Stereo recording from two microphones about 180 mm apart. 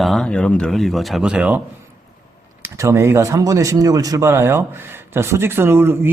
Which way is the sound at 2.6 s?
15° right (ahead or behind).